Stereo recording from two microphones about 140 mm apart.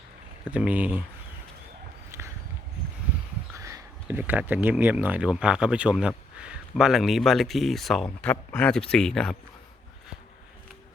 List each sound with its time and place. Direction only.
0.5 s speech: 10° right (ahead or behind)
2.1 s walk: 20° right (ahead or behind)
3.5 s a sound: 25° right (ahead or behind)
4.2 s speech: 15° right (ahead or behind); by 9.3 s 5° left (ahead or behind)